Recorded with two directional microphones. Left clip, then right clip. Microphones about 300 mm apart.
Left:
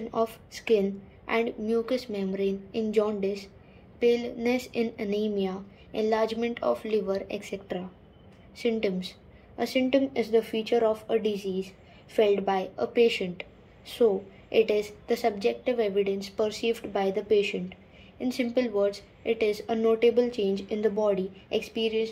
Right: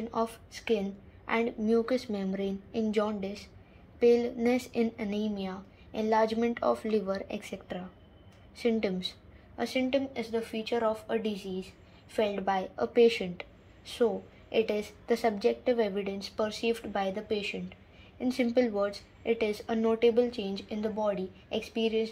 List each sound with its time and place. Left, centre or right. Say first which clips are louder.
0.1 s a woman's voice: left 5 dB; centre
2.3 s a woman's voice: left 7 dB; right
2.9 s a woman's voice: left 6 dB; centre